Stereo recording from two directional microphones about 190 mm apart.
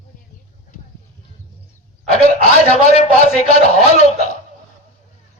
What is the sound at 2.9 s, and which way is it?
A man's voice, 30° left (ahead or behind).